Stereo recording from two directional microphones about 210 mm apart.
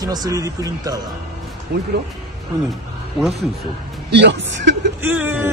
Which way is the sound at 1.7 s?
50° right (ahead or behind).